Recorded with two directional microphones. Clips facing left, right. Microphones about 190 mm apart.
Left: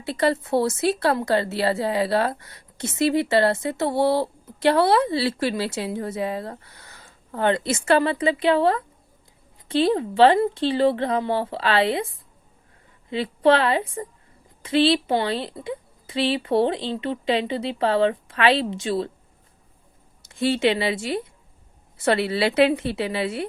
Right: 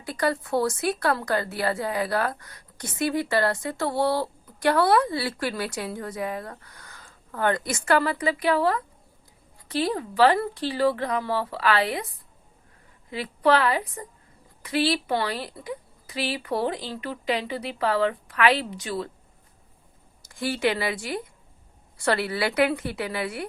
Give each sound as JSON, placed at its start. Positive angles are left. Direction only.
{"t": 0.0, "sound": "speech", "side_deg": 25}
{"t": 20.2, "sound": "speech", "side_deg": 25}